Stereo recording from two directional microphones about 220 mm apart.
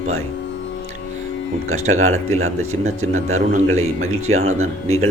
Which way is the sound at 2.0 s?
70° right (ahead or behind).